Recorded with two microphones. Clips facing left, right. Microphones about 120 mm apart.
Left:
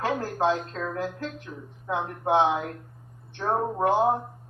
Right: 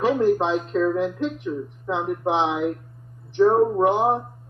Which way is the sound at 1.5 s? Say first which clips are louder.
Right 6 dB; 90° right.